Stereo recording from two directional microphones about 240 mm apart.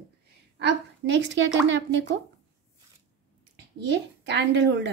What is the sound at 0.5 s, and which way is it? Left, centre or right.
A woman's voice, right.